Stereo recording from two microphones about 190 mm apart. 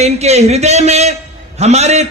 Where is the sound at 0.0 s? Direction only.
35° right (ahead or behind).